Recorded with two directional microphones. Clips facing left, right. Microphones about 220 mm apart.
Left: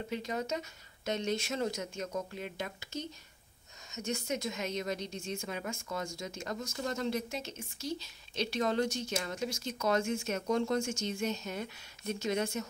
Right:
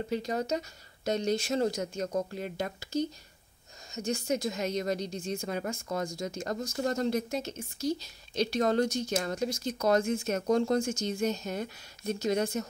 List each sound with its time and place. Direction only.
0.1 s speech: 40° right (ahead or behind)